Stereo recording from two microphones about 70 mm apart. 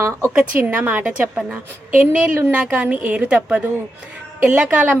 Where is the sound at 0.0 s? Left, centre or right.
Right.